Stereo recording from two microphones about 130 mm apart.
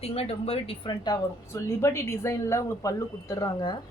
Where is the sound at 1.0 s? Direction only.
25° left (ahead or behind).